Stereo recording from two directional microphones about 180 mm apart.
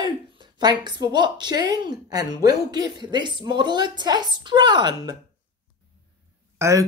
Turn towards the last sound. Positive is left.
turn(degrees=-15)  # may be behind; listen again after turning